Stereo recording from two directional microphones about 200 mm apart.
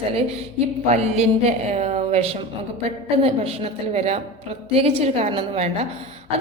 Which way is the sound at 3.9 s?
30° right (ahead or behind).